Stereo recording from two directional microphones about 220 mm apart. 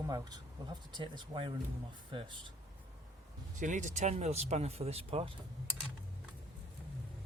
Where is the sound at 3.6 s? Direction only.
35° right (ahead or behind).